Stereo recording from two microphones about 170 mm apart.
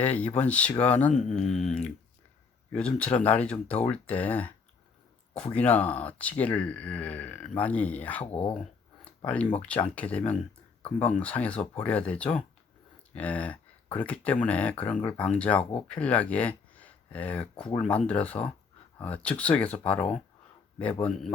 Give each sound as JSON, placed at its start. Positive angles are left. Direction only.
{"t": 0.0, "sound": "speech", "side_deg": 10}